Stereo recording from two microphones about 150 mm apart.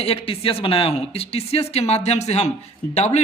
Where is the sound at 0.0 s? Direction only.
40° left (ahead or behind).